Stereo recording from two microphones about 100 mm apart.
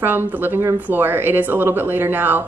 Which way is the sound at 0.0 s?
20° right (ahead or behind).